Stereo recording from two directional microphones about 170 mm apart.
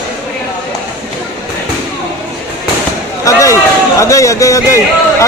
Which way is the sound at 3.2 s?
20° left (ahead or behind).